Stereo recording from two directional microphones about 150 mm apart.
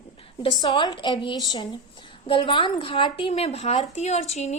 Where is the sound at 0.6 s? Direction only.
30° left (ahead or behind).